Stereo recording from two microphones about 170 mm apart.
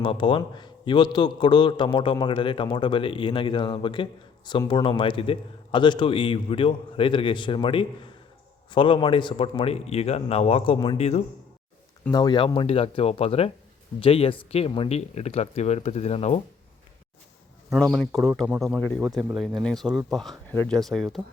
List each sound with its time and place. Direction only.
0.0 s a man's voice: 30° left (ahead or behind)
12.1 s a man's voice: 25° left (ahead or behind)
18.0 s speech: centre (ahead or behind)
18.8 s speech: 10° left (ahead or behind)